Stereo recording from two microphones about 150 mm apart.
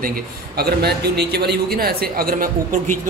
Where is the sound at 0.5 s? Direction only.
90° right.